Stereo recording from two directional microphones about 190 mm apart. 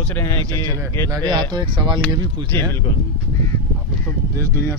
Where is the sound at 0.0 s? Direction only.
10° left (ahead or behind).